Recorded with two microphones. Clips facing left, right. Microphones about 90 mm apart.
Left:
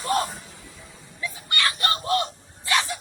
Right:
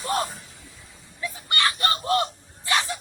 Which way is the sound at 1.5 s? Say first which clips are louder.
Right 1 dB; 30° right (ahead or behind).